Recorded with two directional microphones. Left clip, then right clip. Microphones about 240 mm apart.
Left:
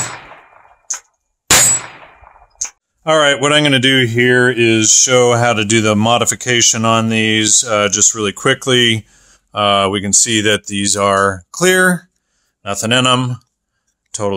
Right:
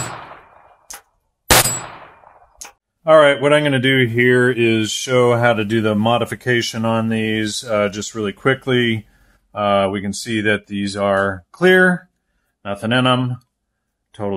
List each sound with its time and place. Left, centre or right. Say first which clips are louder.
3.0 s speech: right 1 dB; left